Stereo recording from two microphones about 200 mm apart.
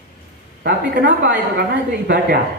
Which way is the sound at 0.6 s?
60° right (ahead or behind).